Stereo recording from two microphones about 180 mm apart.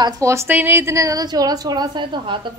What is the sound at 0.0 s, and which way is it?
A woman's voice, 15° right (ahead or behind).